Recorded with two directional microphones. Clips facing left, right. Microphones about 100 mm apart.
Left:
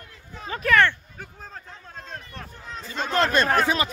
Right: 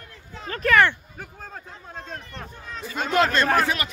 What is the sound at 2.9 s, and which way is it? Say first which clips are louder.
Speech: right 2 dB; 10° right (ahead or behind).